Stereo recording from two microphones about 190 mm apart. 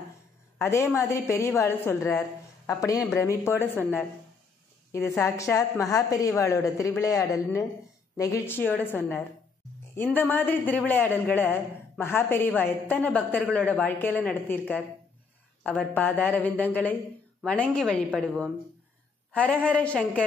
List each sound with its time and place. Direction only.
0.6 s a woman's voice: 15° left (ahead or behind)
15.6 s a woman's voice: 10° left (ahead or behind)